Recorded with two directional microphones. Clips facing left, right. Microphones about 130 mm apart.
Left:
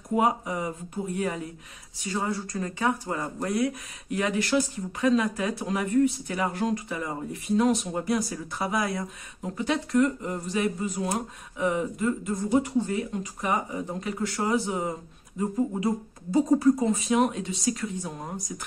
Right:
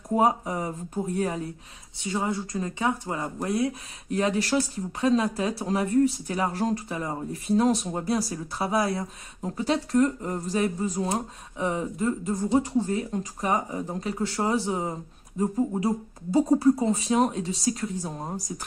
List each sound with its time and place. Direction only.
0.1 s speech: 35° right (ahead or behind)
2.0 s speech: 20° right (ahead or behind); by 18.7 s 35° right (ahead or behind)